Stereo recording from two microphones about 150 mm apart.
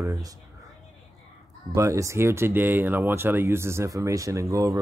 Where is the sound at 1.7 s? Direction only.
20° right (ahead or behind).